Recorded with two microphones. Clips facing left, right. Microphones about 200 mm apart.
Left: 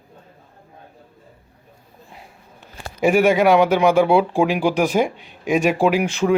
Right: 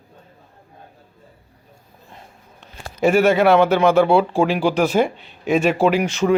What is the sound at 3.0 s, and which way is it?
Speech, 15° left (ahead or behind).